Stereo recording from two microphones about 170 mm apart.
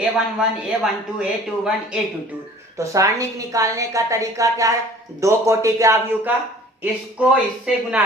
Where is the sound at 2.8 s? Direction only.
20° right (ahead or behind).